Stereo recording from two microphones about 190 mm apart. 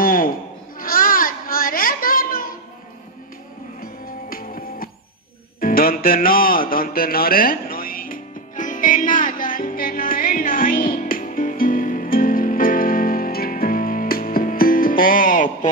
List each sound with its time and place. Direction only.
0.0 s goat: 45° left (ahead or behind)
0.7 s a sound: 45° left (ahead or behind)
3.8 s music: 50° left (ahead or behind)